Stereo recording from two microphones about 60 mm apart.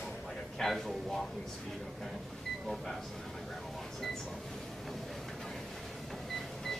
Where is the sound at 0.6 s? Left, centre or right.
Centre.